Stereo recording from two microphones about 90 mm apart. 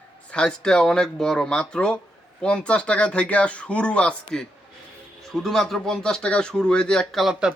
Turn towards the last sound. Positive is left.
turn(degrees=0)  # may be behind; listen again after turning